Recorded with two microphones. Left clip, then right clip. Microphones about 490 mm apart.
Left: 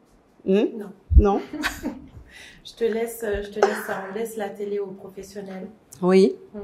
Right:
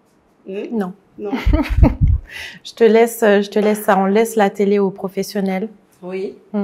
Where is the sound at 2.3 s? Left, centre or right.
Right.